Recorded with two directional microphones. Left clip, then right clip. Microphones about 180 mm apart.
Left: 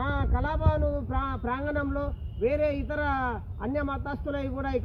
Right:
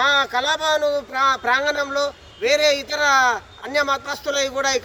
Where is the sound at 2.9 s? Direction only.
10° right (ahead or behind).